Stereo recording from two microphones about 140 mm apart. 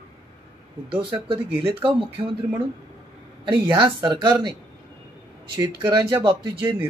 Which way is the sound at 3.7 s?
30° right (ahead or behind).